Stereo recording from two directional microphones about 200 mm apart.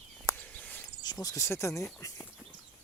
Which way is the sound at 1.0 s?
20° left (ahead or behind).